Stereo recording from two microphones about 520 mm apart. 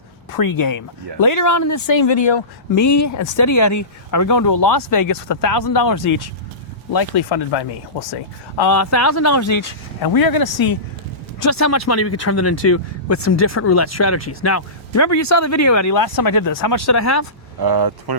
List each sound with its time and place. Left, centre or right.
0.3 s speech: left
8.7 s speech: left
11.4 s speech: left
17.6 s speech: right